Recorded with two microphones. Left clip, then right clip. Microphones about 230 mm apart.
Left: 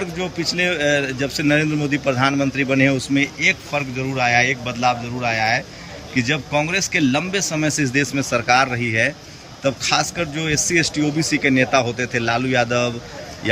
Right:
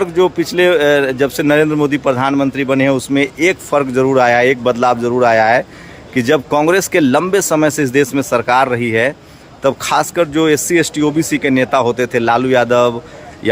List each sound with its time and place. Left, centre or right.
0.0 s speech: centre